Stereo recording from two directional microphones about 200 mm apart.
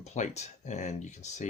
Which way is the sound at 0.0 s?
35° left (ahead or behind).